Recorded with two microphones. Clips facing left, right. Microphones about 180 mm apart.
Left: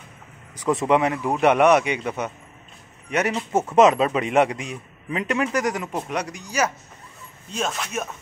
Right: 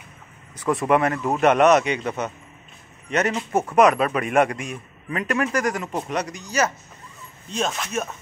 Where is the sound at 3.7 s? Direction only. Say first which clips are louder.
Left 1 dB; 25° left (ahead or behind); by 8.1 s 5° left (ahead or behind).